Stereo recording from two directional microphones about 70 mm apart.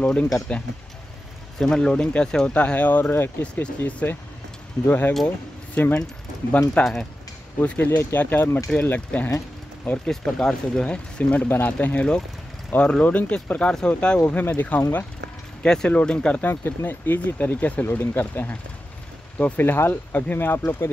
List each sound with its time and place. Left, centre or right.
0.0 s speech: centre
6.8 s speech: centre
7.6 s speech: left
10.0 s speech: centre
11.4 s speech: left; by 16.3 s centre
16.3 s speech: left
19.6 s speech: left